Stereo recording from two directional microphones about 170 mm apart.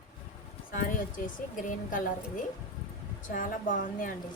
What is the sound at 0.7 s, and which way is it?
A woman's voice, 55° left (ahead or behind).